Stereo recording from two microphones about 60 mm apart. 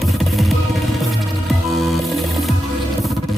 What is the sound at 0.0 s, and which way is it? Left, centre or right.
Music, centre.